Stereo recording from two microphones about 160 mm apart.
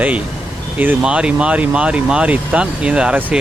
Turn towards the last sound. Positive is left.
turn(degrees=-5)  # may be behind; listen again after turning